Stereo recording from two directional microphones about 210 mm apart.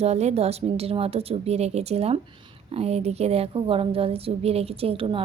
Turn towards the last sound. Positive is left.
turn(degrees=-25)  # may be behind; listen again after turning